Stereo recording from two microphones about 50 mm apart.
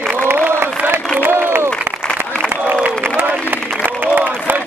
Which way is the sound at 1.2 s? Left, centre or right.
Right.